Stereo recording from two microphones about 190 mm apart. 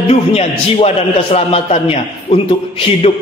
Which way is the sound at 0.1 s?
30° left (ahead or behind).